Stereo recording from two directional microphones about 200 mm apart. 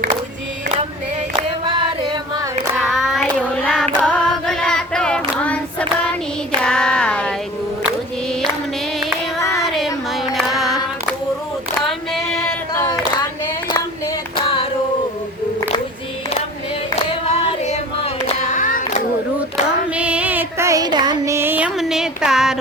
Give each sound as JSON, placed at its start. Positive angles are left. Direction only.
{"t": 1.6, "sound": "music", "side_deg": -25}
{"t": 2.7, "sound": "child singing", "side_deg": 0}
{"t": 4.0, "sound": "female singing", "side_deg": 5}
{"t": 5.4, "sound": "hands", "side_deg": 5}
{"t": 6.6, "sound": "a sound", "side_deg": 5}
{"t": 9.5, "sound": "child singing", "side_deg": 0}
{"t": 10.3, "sound": "carnatic music", "side_deg": 0}
{"t": 11.9, "sound": "female singing", "side_deg": 0}
{"t": 12.7, "sound": "singing", "side_deg": 15}
{"t": 17.7, "sound": "female singing", "side_deg": 30}
{"t": 19.9, "sound": "child singing", "side_deg": -5}